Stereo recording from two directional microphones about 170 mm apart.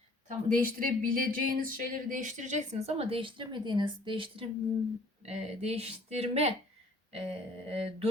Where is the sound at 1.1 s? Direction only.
55° right (ahead or behind); by 6.5 s 40° right (ahead or behind).